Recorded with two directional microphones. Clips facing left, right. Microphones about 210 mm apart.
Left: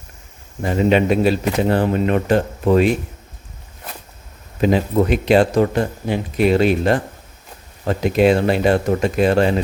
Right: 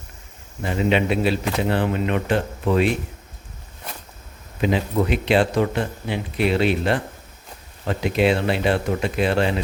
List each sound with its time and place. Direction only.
0.6 s speech: 40° left (ahead or behind)
4.6 s speech: 45° left (ahead or behind)